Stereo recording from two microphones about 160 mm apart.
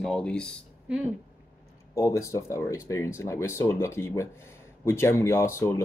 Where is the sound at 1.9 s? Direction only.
20° left (ahead or behind).